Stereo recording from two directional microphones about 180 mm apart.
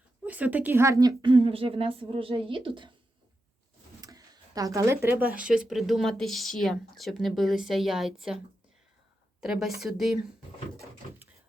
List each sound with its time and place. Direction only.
0.3 s speech: 10° right (ahead or behind); by 2.9 s 25° right (ahead or behind)
4.0 s a sound: 20° right (ahead or behind)
5.4 s speech: 5° right (ahead or behind)
9.4 s speech: 5° right (ahead or behind)